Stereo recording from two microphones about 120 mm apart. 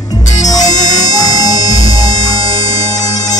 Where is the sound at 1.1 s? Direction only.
30° left (ahead or behind).